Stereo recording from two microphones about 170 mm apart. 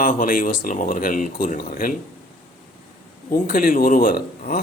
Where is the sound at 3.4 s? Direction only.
55° left (ahead or behind).